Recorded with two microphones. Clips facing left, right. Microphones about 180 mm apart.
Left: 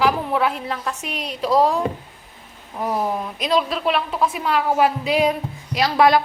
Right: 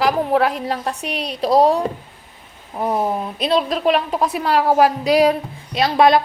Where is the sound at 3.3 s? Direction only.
35° right (ahead or behind).